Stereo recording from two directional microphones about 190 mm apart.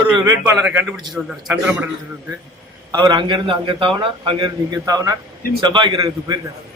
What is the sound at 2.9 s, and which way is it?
A man's voice, 20° right (ahead or behind).